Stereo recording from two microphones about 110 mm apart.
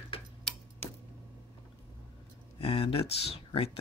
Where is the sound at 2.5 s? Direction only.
60° left (ahead or behind).